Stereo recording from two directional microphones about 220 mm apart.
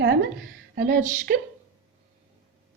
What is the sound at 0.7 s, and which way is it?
Speech, 45° right (ahead or behind).